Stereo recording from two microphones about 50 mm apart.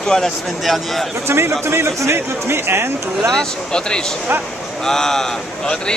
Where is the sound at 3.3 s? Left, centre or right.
Centre.